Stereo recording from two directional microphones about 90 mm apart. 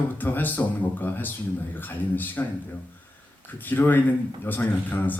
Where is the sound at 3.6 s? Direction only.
20° left (ahead or behind).